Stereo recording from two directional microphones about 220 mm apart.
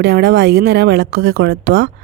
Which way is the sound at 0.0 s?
50° right (ahead or behind).